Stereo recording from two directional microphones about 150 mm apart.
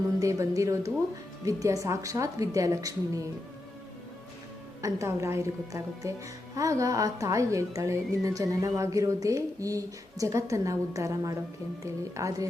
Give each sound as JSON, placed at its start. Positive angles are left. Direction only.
{"t": 0.2, "sound": "speech", "side_deg": -20}
{"t": 4.8, "sound": "speech", "side_deg": -20}